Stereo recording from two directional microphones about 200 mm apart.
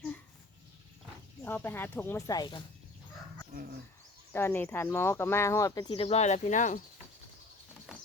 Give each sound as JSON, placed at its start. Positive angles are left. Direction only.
{"t": 1.5, "sound": "speech", "side_deg": 10}
{"t": 4.3, "sound": "speech", "side_deg": 10}
{"t": 5.9, "sound": "speech", "side_deg": 30}
{"t": 7.9, "sound": "a sound", "side_deg": -5}